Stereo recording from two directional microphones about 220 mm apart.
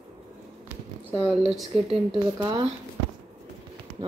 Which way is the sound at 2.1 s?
15° right (ahead or behind).